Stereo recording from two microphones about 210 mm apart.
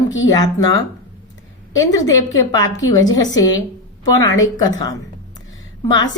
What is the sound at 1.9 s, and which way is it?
Speech, 15° left (ahead or behind).